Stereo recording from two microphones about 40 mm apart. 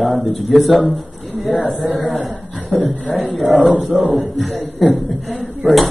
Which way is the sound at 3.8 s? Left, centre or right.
Centre.